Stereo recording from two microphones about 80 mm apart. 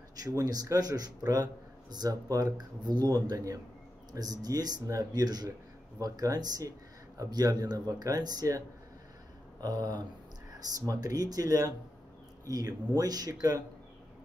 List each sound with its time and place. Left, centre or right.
0.1 s speech: right